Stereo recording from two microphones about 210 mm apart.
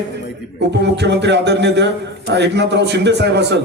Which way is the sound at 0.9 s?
55° right (ahead or behind).